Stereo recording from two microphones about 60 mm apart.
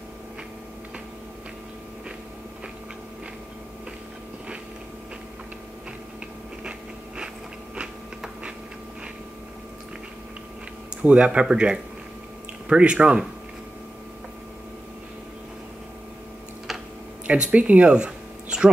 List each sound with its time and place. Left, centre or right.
10.9 s speech: centre
17.3 s speech: centre